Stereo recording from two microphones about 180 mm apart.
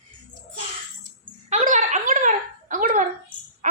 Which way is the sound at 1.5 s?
45° right (ahead or behind).